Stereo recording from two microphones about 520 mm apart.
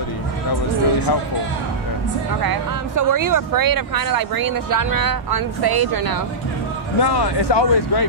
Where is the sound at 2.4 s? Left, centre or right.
Right.